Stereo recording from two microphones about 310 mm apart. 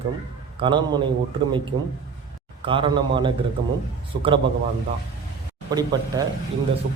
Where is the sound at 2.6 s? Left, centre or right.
Centre.